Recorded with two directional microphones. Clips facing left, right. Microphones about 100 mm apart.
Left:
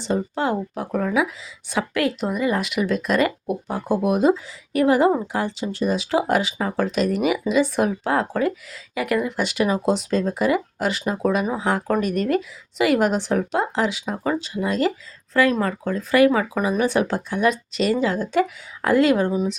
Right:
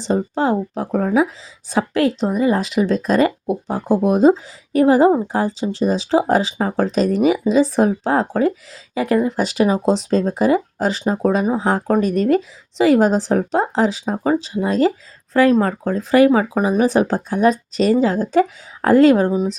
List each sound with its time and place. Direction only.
0.0 s speech: 35° right (ahead or behind)